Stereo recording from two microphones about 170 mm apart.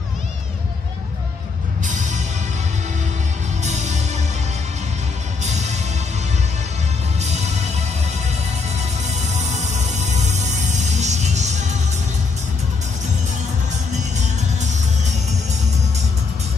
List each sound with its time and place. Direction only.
1.9 s music: 45° right (ahead or behind)
3.6 s music: 45° right (ahead or behind)
5.4 s music: 40° right (ahead or behind)
7.2 s music: 40° right (ahead or behind)
9.1 s music: 40° right (ahead or behind)